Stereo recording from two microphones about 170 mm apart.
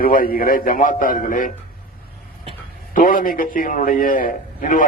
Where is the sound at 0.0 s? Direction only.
60° left (ahead or behind).